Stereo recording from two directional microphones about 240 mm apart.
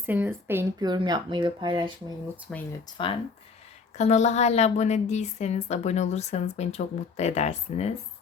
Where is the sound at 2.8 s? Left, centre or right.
Left.